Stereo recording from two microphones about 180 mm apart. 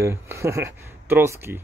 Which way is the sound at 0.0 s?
15° right (ahead or behind).